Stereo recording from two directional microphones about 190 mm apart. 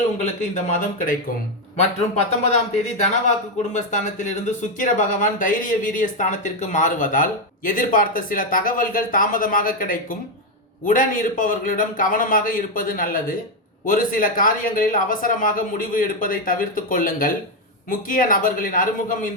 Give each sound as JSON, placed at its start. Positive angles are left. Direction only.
{"t": 0.5, "sound": "a man's voice", "side_deg": 40}